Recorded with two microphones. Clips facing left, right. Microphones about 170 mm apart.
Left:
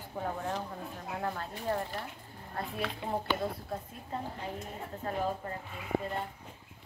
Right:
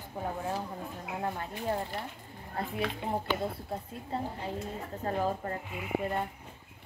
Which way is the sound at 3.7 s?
30° right (ahead or behind).